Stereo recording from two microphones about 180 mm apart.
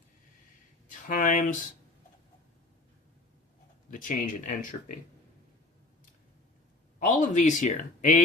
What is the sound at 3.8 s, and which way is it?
Speech, 45° left (ahead or behind).